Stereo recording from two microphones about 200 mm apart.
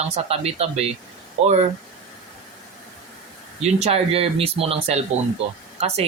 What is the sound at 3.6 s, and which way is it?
A man's voice, 30° right (ahead or behind).